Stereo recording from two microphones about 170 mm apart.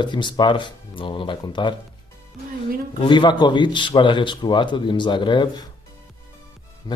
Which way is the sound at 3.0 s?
25° left (ahead or behind).